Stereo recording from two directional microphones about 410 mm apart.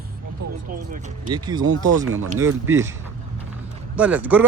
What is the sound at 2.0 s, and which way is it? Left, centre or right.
Speech, right.